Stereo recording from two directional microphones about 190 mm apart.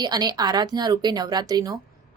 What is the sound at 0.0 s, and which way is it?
A woman's voice, 20° right (ahead or behind).